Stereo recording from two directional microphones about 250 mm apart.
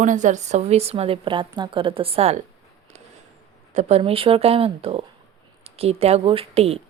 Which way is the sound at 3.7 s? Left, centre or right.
Right.